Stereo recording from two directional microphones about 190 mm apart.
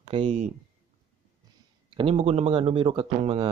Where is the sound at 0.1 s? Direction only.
35° right (ahead or behind).